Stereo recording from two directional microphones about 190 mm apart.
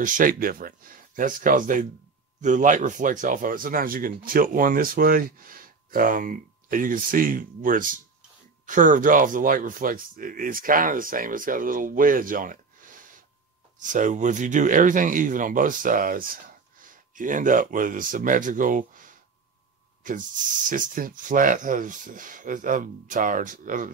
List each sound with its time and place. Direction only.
0.0 s speech: 45° right (ahead or behind)